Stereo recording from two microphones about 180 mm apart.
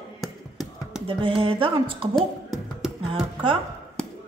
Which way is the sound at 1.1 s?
30° right (ahead or behind).